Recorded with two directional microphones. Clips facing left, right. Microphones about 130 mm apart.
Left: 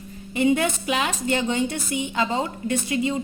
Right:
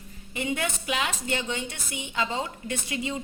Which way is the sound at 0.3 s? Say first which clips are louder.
Left 9 dB; 35° left (ahead or behind).